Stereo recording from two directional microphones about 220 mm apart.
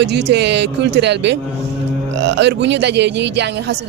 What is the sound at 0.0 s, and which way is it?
A man's voice, 50° right (ahead or behind).